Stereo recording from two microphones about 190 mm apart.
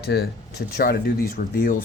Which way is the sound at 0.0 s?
55° left (ahead or behind).